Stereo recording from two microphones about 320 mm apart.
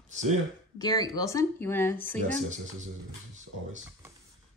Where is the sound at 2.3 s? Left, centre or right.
Right.